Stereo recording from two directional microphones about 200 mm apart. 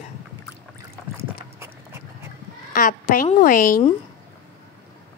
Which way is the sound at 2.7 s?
45° left (ahead or behind).